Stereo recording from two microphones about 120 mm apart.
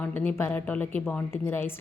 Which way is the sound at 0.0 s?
15° left (ahead or behind).